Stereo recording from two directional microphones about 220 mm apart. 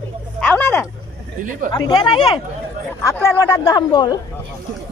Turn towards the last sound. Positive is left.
turn(degrees=20)  # may be behind; listen again after turning